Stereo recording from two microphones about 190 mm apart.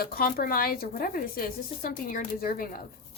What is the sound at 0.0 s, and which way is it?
Speech, 55° left (ahead or behind).